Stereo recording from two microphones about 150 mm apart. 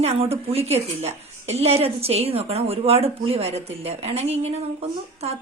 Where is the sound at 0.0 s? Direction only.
40° right (ahead or behind).